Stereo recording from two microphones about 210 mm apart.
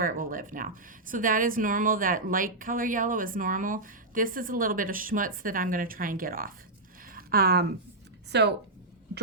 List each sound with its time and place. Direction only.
0.0 s speech: 40° right (ahead or behind)
7.0 s a sound: 45° right (ahead or behind)
8.3 s a woman's voice: 55° right (ahead or behind)